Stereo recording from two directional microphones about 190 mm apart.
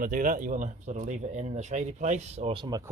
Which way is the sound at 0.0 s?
45° right (ahead or behind).